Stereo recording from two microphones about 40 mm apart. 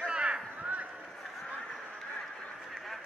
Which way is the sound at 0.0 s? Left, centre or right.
Right.